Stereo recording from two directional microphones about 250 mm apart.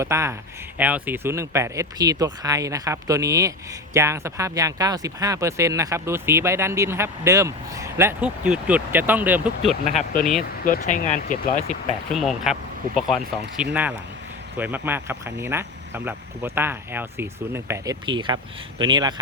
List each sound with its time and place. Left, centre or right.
0.0 s speech: centre
10.7 s speech: left
12.1 s speech: centre